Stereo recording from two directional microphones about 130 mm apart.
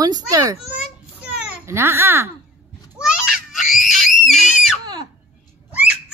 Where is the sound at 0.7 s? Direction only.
10° right (ahead or behind).